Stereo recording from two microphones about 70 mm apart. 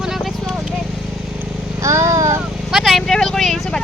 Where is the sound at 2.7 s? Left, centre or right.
Centre.